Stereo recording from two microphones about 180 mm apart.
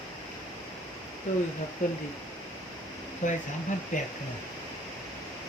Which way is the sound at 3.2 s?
45° left (ahead or behind).